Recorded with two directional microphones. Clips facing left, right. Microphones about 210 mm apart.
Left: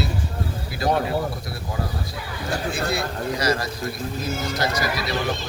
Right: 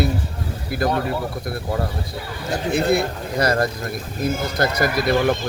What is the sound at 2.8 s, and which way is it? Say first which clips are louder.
A man's voice: right 5 dB; 55° right (ahead or behind).